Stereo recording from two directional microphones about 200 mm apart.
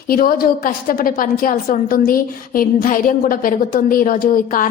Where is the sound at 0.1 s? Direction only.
45° left (ahead or behind).